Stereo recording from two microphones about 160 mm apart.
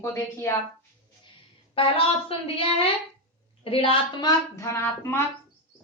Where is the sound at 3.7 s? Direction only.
35° left (ahead or behind).